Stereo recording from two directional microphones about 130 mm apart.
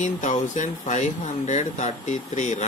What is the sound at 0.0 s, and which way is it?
Speech, 70° left (ahead or behind).